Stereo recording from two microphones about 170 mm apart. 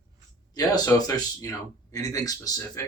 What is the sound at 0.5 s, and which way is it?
Speech, 20° left (ahead or behind).